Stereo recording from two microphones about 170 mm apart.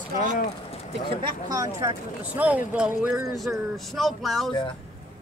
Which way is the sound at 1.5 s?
20° right (ahead or behind).